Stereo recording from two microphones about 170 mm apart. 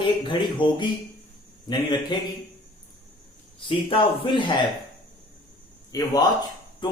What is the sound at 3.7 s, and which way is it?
Speech, 30° left (ahead or behind).